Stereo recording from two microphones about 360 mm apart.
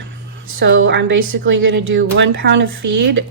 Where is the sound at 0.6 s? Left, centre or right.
Right.